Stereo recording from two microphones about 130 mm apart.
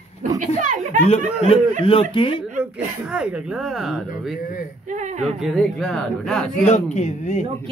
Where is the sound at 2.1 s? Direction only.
40° left (ahead or behind).